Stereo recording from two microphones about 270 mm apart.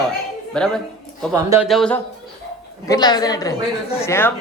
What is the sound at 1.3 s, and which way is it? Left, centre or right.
Speech, centre.